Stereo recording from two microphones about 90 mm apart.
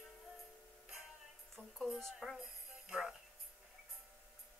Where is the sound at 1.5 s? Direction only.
Centre (ahead or behind).